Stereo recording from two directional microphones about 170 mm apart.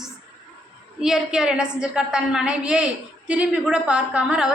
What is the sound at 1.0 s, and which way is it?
A woman's voice, 5° right (ahead or behind).